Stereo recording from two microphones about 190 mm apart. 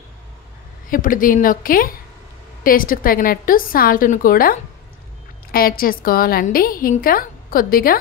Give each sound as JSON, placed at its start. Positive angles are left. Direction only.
{"t": 0.8, "sound": "a woman's voice", "side_deg": 45}